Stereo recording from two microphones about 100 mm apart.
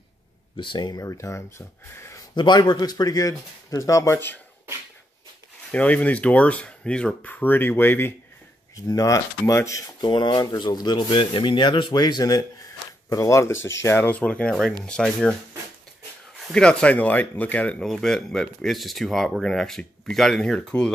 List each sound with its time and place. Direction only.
0.6 s speech: 50° left (ahead or behind)
1.0 s speech: 30° left (ahead or behind)
2.0 s a sound: 25° left (ahead or behind)
2.3 s speech: 50° left (ahead or behind); by 4.4 s 25° left (ahead or behind)
5.7 s speech: 15° left (ahead or behind)
8.8 s speech: 35° left (ahead or behind)
9.9 s speech: 45° left (ahead or behind)
13.1 s speech: 30° left (ahead or behind); by 15.3 s 10° left (ahead or behind)
16.5 s speech: 10° left (ahead or behind)